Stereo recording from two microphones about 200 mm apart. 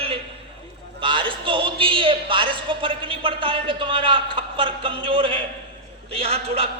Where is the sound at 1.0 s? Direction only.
25° right (ahead or behind).